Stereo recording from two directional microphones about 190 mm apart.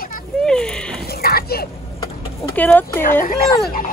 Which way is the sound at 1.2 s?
55° left (ahead or behind).